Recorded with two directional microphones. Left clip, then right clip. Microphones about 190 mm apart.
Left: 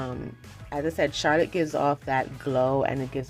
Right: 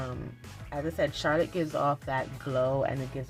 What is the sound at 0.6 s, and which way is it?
Speech, 40° left (ahead or behind).